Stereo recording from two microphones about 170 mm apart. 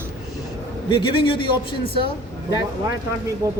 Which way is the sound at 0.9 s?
30° left (ahead or behind).